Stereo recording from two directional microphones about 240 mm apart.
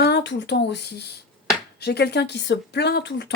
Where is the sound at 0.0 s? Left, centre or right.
Left.